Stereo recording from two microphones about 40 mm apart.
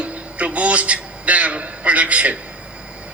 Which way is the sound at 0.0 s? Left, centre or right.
Right.